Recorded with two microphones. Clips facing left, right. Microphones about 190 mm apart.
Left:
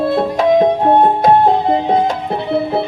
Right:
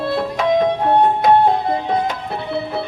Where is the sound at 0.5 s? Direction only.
30° left (ahead or behind).